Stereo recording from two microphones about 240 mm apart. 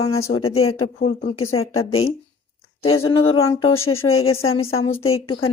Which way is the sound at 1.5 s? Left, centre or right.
Left.